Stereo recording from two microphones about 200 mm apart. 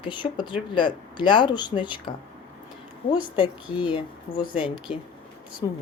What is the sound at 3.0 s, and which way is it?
Speech, 25° left (ahead or behind).